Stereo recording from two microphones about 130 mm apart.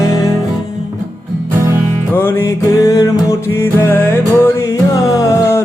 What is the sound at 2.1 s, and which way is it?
Music, 15° left (ahead or behind).